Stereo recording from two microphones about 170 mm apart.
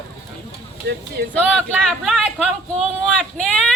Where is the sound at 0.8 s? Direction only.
70° right (ahead or behind).